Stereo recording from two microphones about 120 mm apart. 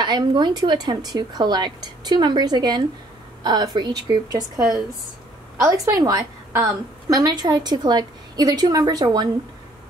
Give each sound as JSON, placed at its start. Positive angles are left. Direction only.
{"t": 0.0, "sound": "a woman's voice", "side_deg": -35}
{"t": 5.6, "sound": "a woman's voice", "side_deg": -25}